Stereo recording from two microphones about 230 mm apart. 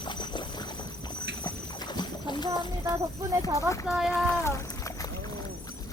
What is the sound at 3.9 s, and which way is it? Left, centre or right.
Speech, centre.